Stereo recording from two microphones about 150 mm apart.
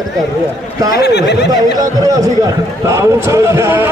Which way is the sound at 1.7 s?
25° right (ahead or behind).